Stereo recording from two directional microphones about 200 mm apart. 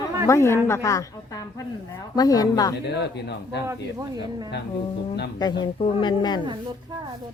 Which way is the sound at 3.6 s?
20° right (ahead or behind).